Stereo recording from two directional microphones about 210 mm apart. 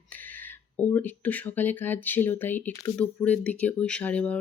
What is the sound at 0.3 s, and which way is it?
Speech, 10° left (ahead or behind).